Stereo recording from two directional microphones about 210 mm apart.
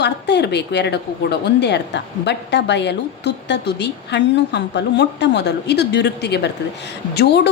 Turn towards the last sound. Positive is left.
turn(degrees=50)  # may be behind; listen again after turning